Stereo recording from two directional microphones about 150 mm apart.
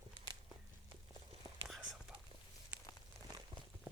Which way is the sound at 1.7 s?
Centre (ahead or behind).